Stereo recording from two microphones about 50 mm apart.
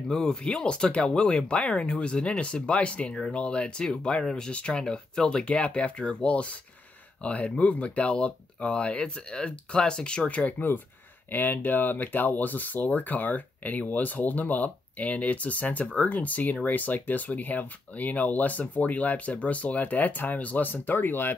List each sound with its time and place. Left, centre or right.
0.1 s speech: centre
4.5 s speech: left
10.4 s speech: left